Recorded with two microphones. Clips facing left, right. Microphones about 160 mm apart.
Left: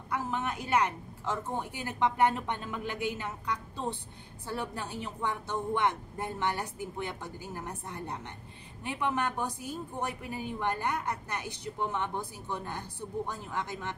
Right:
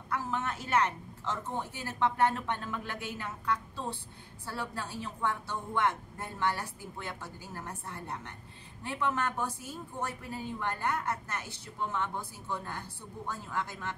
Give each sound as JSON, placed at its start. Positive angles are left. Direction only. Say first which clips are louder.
{"t": 0.1, "sound": "a woman's voice", "louder": "left 1 dB", "side_deg": 15}